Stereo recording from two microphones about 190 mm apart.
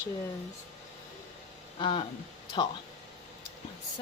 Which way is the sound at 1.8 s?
25° left (ahead or behind).